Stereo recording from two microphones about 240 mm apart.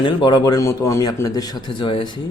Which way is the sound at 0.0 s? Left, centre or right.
Centre.